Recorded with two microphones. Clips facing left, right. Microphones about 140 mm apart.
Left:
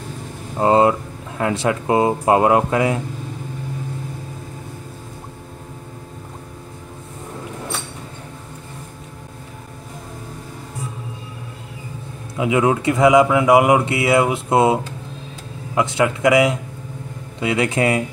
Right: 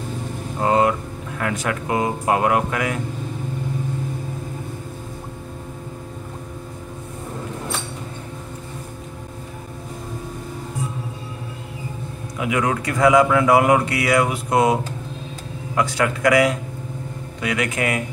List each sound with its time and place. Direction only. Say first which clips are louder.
0.6 s speech: left 4 dB; 25° left (ahead or behind)
12.4 s speech: left 5 dB; 25° left (ahead or behind)